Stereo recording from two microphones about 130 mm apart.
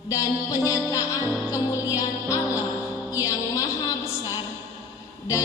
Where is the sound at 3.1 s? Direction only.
25° left (ahead or behind).